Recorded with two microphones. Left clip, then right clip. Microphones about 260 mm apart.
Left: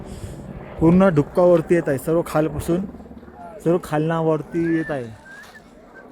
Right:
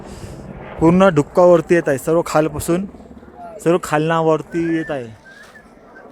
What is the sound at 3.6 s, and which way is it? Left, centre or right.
Speech, right.